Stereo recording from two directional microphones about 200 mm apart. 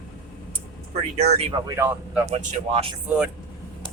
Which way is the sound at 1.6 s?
15° right (ahead or behind).